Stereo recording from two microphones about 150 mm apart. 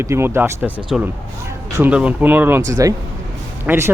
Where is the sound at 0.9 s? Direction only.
5° right (ahead or behind).